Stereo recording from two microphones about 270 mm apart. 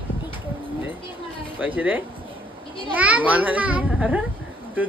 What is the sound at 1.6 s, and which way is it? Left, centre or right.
A child's voice, centre.